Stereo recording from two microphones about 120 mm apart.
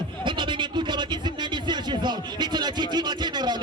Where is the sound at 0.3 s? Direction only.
40° right (ahead or behind).